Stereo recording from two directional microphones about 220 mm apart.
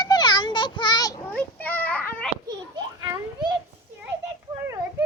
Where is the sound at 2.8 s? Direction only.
15° right (ahead or behind).